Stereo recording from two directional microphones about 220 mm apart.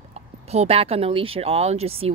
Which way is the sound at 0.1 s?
30° right (ahead or behind).